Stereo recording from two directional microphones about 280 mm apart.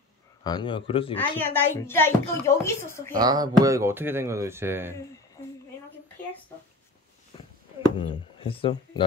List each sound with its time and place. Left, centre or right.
0.4 s a woman's voice: centre
1.3 s a woman's voice: centre
3.2 s speech: centre
8.0 s speech: centre